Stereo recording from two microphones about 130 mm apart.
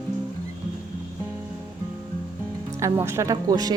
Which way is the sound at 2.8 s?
25° right (ahead or behind).